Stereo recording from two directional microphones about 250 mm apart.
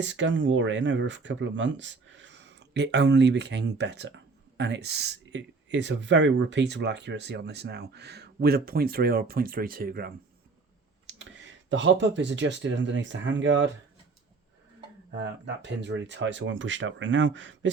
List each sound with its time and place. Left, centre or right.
0.0 s speech: right
15.2 s speech: right